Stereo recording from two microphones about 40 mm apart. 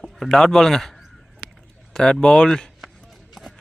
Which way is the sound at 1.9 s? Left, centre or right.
Centre.